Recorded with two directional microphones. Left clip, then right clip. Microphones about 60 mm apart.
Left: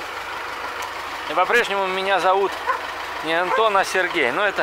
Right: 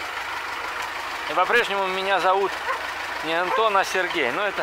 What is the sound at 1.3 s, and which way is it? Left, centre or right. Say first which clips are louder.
Speech: left 2 dB; centre.